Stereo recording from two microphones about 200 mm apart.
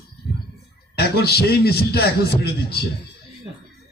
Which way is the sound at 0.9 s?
50° left (ahead or behind).